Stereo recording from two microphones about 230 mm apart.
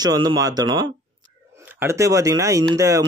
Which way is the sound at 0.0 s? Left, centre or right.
Centre.